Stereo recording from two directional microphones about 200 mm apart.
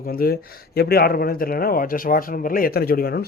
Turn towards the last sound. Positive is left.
turn(degrees=50)  # may be behind; listen again after turning